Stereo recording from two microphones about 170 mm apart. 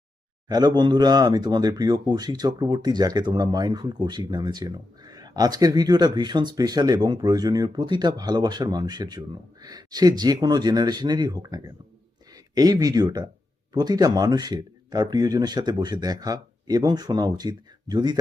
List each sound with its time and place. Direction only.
0.4 s speech: 25° right (ahead or behind)